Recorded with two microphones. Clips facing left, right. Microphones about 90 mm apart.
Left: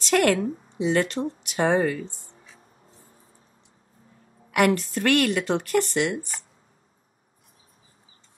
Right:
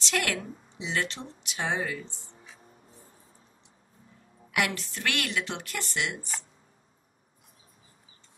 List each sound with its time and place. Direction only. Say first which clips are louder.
0.0 s a woman's voice: left 10 dB; 45° left (ahead or behind)
4.5 s a woman's voice: left 9 dB; 45° left (ahead or behind)